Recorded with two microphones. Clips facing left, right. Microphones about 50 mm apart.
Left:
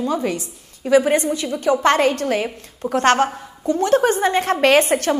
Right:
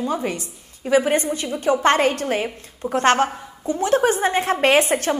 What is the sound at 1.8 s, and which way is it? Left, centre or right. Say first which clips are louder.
A woman's voice: left 1 dB; right.